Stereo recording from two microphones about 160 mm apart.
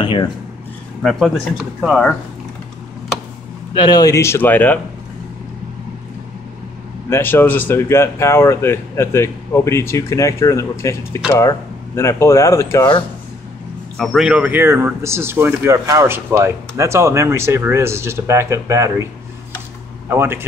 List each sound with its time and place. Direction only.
0.0 s speech: 30° left (ahead or behind)
1.8 s speech: centre (ahead or behind)
3.7 s speech: 25° left (ahead or behind); by 4.7 s 10° left (ahead or behind)
7.1 s speech: 15° left (ahead or behind)
13.9 s speech: centre (ahead or behind); by 19.0 s 15° right (ahead or behind)
20.1 s speech: 15° right (ahead or behind)